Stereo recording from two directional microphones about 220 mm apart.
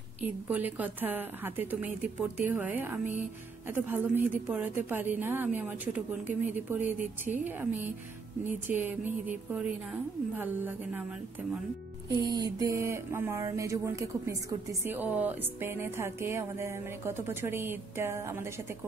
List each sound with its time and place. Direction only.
0.2 s speech: 10° right (ahead or behind)
8.6 s speech: 10° right (ahead or behind)
12.1 s speech: 20° right (ahead or behind)